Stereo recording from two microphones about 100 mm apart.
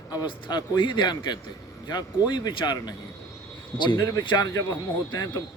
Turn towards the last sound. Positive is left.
turn(degrees=45)  # may be behind; listen again after turning